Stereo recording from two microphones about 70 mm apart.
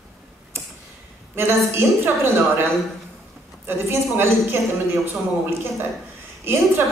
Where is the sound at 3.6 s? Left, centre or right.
Right.